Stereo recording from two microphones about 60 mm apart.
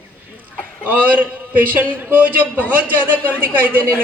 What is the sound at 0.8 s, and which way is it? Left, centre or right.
A man's voice, right.